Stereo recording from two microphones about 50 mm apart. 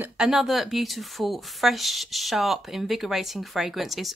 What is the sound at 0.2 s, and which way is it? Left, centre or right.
A woman's voice, centre.